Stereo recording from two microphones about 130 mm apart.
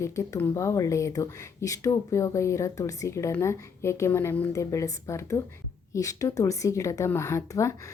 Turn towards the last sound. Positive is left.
turn(degrees=25)  # may be behind; listen again after turning